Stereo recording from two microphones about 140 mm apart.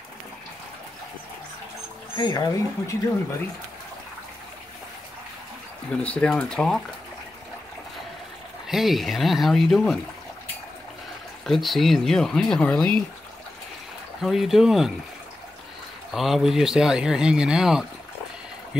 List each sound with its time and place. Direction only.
2.1 s speech: 30° left (ahead or behind)
6.0 s speech: 5° left (ahead or behind)
8.6 s speech: centre (ahead or behind)
11.4 s speech: centre (ahead or behind)
14.2 s speech: centre (ahead or behind)
16.1 s speech: centre (ahead or behind)